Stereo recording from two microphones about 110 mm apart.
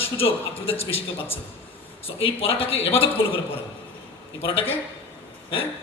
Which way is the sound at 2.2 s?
60° left (ahead or behind).